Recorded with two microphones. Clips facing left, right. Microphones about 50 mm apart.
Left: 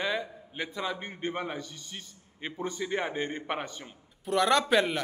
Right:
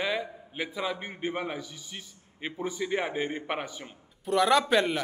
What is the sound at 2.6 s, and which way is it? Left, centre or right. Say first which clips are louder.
A man's voice: right 1 dB; centre.